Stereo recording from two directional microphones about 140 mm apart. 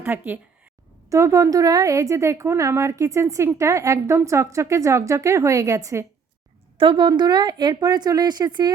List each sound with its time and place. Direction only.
0.0 s a woman's voice: 15° right (ahead or behind)
6.7 s a woman's voice: 35° right (ahead or behind)